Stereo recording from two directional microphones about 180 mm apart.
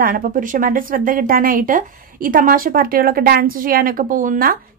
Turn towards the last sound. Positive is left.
turn(degrees=-50)  # may be behind; listen again after turning